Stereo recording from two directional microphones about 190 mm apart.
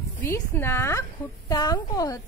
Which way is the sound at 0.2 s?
15° left (ahead or behind).